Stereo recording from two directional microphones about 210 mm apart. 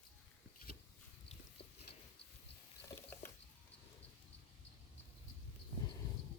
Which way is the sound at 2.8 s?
10° left (ahead or behind).